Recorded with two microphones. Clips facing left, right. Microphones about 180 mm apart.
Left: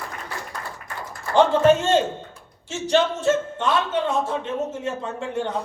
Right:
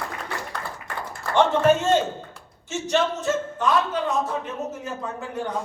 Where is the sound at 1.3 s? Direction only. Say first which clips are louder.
Left 2 dB; 30° left (ahead or behind).